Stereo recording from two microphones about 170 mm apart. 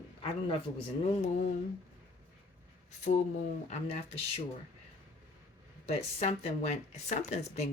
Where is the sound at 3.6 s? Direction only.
40° left (ahead or behind).